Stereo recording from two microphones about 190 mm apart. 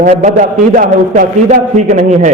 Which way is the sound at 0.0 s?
45° right (ahead or behind).